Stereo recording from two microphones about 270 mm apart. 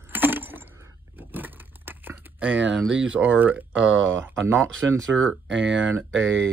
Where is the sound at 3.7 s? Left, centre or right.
Right.